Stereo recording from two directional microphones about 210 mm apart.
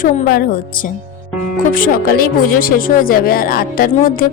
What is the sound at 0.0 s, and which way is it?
Speech, 40° left (ahead or behind).